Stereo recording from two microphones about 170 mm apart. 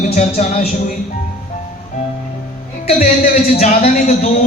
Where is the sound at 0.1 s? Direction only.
45° left (ahead or behind).